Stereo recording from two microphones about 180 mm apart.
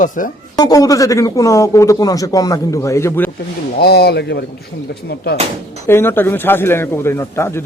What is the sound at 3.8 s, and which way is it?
Speech, 65° left (ahead or behind).